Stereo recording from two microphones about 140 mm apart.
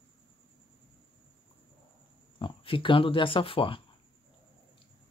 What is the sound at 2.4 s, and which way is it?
Speech, 35° left (ahead or behind).